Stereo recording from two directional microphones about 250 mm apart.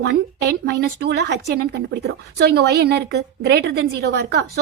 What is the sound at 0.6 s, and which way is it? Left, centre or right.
Speech, right.